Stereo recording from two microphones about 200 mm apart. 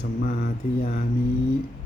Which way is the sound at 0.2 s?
40° left (ahead or behind).